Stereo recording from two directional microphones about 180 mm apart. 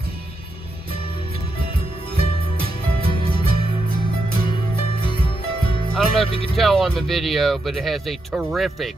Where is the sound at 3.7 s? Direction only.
30° left (ahead or behind).